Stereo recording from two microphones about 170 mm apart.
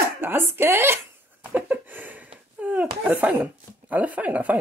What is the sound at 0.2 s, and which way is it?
Speech, 15° right (ahead or behind).